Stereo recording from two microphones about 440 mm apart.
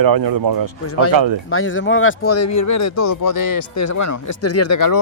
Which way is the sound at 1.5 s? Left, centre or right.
Left.